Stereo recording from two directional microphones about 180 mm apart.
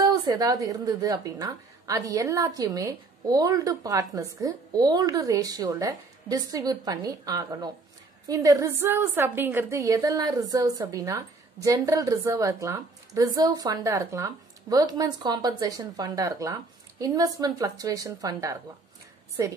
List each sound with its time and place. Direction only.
0.0 s a woman's voice: 20° right (ahead or behind)